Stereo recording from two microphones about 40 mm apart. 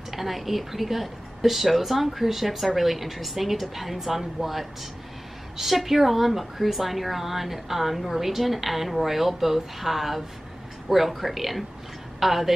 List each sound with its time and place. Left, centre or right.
0.1 s a woman's voice: centre